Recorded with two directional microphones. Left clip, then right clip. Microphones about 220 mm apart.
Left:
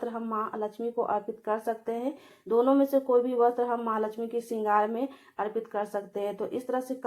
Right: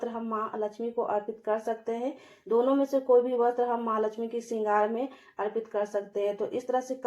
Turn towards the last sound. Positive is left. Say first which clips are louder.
# right 2 dB
turn(degrees=25)  # may be behind; listen again after turning